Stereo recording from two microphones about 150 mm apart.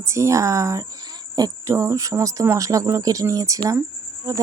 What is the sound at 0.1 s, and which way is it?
Speech, 20° right (ahead or behind).